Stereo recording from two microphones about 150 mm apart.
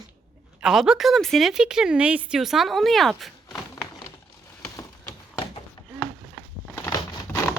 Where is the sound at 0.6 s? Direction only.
5° right (ahead or behind).